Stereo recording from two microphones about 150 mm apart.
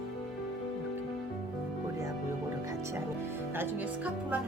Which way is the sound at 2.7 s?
20° right (ahead or behind).